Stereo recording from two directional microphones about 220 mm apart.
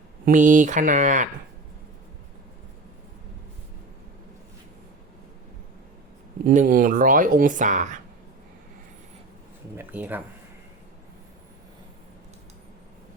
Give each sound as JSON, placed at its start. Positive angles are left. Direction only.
{"t": 0.3, "sound": "speech", "side_deg": -35}
{"t": 6.4, "sound": "speech", "side_deg": -35}
{"t": 9.7, "sound": "speech", "side_deg": -10}